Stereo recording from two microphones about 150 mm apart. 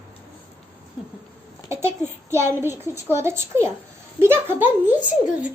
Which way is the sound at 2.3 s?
15° right (ahead or behind).